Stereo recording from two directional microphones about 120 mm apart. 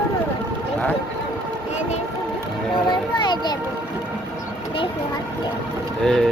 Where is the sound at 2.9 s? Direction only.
40° left (ahead or behind).